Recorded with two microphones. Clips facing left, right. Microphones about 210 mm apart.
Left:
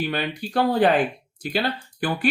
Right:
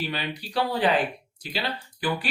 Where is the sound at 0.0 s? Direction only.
50° left (ahead or behind).